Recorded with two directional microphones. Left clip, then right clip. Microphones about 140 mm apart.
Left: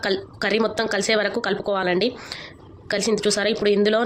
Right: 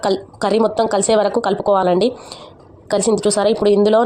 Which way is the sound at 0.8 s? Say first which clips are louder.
Right 6 dB; 35° right (ahead or behind).